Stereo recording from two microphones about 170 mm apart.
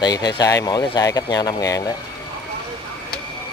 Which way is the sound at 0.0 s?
25° left (ahead or behind).